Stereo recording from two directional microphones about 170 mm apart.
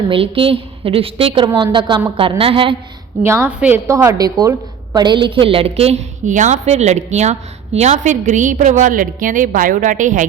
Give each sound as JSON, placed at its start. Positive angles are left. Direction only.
{"t": 0.1, "sound": "a woman's voice", "side_deg": -30}
{"t": 3.2, "sound": "a woman's voice", "side_deg": -15}